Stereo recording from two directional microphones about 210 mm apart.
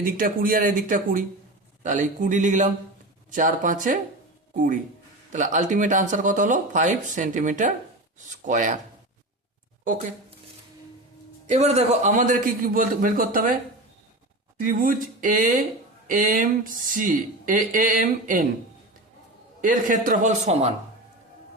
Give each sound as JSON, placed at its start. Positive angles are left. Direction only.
{"t": 0.0, "sound": "speech", "side_deg": -40}
{"t": 11.5, "sound": "speech", "side_deg": -30}
{"t": 14.6, "sound": "speech", "side_deg": -40}
{"t": 19.6, "sound": "speech", "side_deg": -40}